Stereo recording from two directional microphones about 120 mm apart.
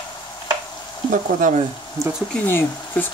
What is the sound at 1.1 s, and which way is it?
Speech, 90° right.